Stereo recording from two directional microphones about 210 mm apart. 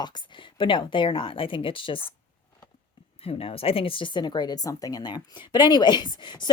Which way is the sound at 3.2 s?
30° left (ahead or behind).